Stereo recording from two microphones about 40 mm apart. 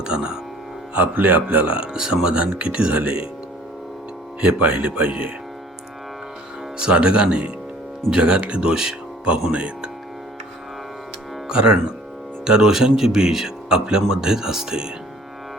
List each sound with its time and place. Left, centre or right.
0.0 s speech: centre
0.9 s speech: right
1.5 s speech: right
4.4 s speech: right
6.7 s speech: right
9.5 s speech: right
11.4 s speech: right